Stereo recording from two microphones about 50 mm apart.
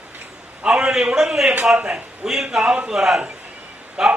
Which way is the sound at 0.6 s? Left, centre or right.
Centre.